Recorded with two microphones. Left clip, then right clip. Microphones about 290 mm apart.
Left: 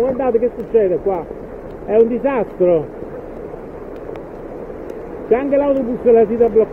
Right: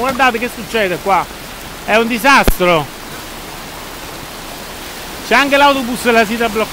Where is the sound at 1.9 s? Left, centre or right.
Right.